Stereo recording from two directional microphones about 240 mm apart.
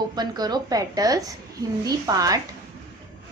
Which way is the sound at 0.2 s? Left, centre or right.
Centre.